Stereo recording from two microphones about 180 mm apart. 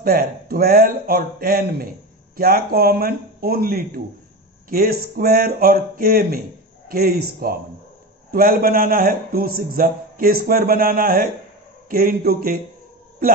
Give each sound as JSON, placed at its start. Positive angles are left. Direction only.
{"t": 0.0, "sound": "a man's voice", "side_deg": -55}